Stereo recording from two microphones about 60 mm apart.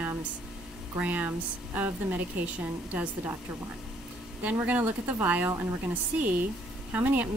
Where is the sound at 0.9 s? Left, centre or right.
Right.